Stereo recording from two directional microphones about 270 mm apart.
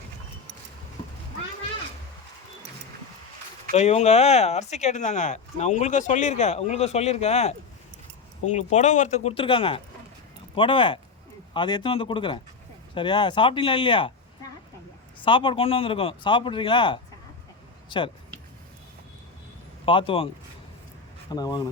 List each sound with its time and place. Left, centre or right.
3.7 s speech: left
8.5 s speech: left
15.2 s speech: centre
19.8 s speech: centre